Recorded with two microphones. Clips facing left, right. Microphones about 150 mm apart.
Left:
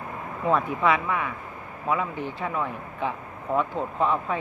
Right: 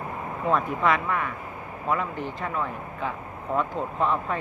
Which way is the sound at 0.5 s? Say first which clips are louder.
Left 1 dB; centre (ahead or behind).